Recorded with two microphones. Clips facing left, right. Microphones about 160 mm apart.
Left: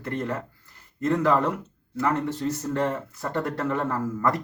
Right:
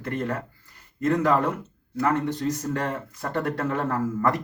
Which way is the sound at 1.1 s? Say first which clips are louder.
Even; centre (ahead or behind).